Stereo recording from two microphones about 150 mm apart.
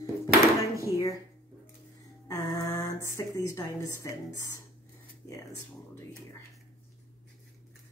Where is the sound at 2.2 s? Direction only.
20° left (ahead or behind).